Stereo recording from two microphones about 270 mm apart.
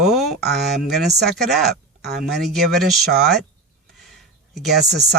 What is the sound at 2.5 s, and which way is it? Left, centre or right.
Speech, centre.